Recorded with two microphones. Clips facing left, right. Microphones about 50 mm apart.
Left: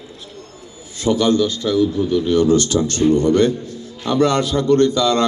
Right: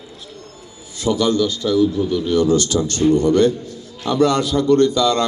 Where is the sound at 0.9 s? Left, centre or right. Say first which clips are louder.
Left 1 dB; left.